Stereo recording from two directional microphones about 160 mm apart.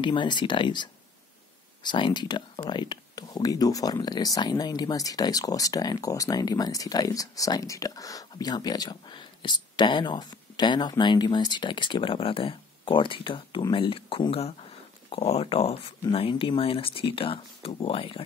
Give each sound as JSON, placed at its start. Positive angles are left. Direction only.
{"t": 0.0, "sound": "speech", "side_deg": 30}